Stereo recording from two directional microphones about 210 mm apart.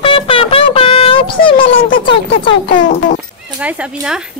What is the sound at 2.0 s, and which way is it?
Speech, 25° left (ahead or behind).